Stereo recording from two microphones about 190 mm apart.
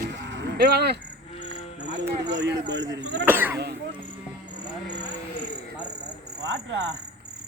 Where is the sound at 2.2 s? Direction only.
65° right (ahead or behind).